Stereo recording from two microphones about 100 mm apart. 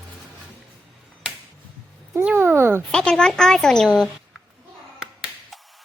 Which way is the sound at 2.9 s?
10° left (ahead or behind).